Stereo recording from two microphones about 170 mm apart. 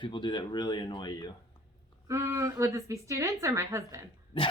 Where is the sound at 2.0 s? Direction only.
15° right (ahead or behind).